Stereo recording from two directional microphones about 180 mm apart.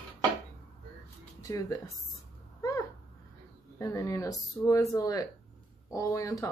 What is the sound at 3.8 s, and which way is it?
Speech, 20° left (ahead or behind).